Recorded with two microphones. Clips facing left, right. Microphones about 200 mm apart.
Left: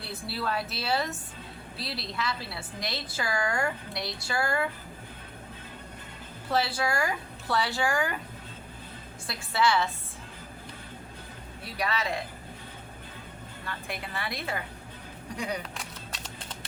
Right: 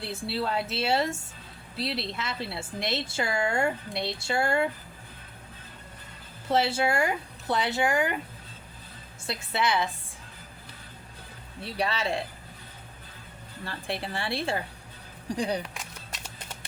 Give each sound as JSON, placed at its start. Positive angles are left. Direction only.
{"t": 0.0, "sound": "a woman's voice", "side_deg": -25}
{"t": 6.5, "sound": "a woman's voice", "side_deg": -25}
{"t": 9.2, "sound": "a woman's voice", "side_deg": -20}
{"t": 11.6, "sound": "a woman's voice", "side_deg": -30}
{"t": 13.7, "sound": "a woman's voice", "side_deg": -30}